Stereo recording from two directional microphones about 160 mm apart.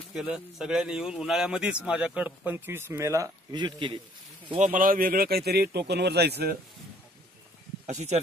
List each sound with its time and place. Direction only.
0.1 s speech: centre (ahead or behind); by 4.0 s 30° right (ahead or behind)
4.6 s speech: 55° right (ahead or behind); by 6.5 s 90° right
7.8 s speech: 45° right (ahead or behind)